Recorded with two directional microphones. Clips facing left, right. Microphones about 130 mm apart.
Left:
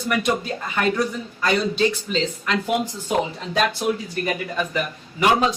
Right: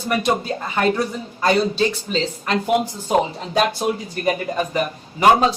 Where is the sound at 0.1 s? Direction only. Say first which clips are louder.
Right 2 dB; 35° right (ahead or behind).